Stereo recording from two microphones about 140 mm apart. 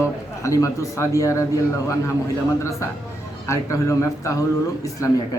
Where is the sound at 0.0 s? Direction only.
20° left (ahead or behind).